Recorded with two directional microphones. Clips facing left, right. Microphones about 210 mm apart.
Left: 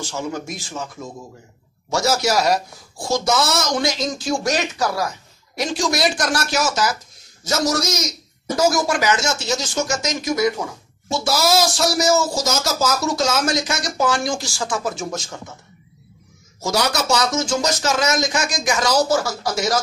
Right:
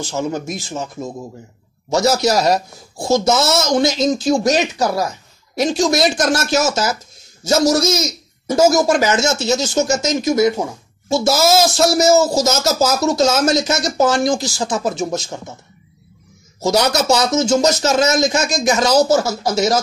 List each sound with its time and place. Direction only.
0.0 s speech: 20° right (ahead or behind)
16.6 s speech: 20° right (ahead or behind)